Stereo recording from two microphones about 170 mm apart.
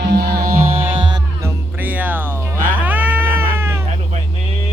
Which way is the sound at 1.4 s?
15° right (ahead or behind).